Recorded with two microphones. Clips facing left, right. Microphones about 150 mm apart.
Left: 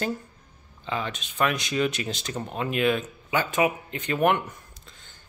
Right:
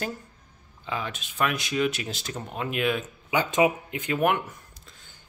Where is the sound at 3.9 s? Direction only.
5° right (ahead or behind).